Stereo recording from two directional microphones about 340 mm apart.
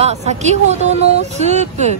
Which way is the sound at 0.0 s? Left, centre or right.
Centre.